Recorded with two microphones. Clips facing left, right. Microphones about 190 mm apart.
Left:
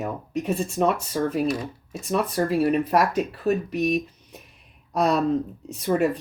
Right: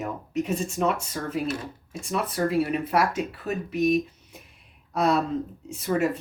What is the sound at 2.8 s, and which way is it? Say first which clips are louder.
Speech: left 3 dB; 35° left (ahead or behind).